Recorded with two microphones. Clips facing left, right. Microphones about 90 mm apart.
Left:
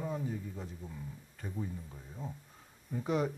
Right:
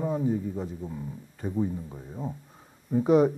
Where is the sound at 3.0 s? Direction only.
15° right (ahead or behind).